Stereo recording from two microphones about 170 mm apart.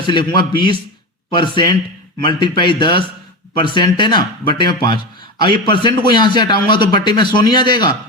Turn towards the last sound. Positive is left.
turn(degrees=25)  # may be behind; listen again after turning